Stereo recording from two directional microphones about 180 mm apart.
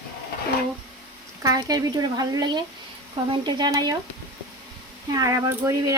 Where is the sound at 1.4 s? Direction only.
20° right (ahead or behind).